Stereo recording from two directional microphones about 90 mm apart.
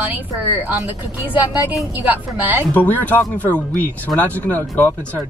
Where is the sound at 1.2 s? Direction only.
20° right (ahead or behind).